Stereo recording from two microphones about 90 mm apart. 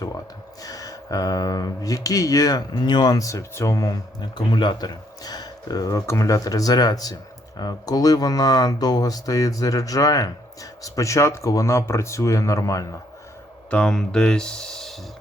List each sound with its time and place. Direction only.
0.6 s speech: 40° left (ahead or behind)
13.7 s speech: 10° left (ahead or behind)